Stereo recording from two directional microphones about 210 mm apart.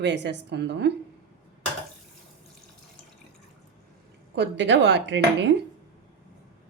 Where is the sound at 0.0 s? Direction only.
55° right (ahead or behind).